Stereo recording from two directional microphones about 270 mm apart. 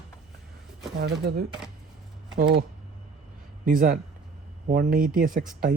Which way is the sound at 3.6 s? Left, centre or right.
Right.